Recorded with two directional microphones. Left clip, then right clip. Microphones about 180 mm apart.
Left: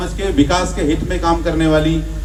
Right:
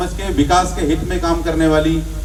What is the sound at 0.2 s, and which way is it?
A man's voice, 40° left (ahead or behind).